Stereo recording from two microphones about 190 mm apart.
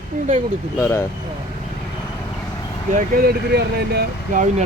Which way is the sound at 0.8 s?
15° left (ahead or behind).